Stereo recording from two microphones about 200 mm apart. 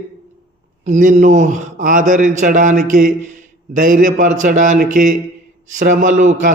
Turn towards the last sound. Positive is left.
turn(degrees=-40)  # may be behind; listen again after turning